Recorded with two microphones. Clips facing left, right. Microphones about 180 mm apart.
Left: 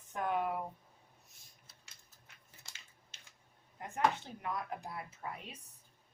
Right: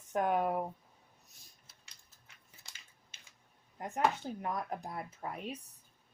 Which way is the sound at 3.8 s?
35° right (ahead or behind).